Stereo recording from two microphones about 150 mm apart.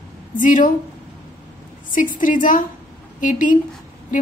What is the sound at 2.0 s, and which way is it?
A woman's voice, 60° left (ahead or behind).